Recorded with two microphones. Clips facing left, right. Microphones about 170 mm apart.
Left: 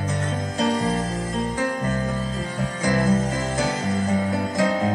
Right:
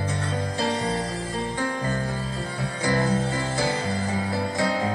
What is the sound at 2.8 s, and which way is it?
Music, 35° right (ahead or behind).